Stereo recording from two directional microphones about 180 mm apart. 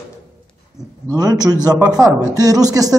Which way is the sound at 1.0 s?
20° right (ahead or behind).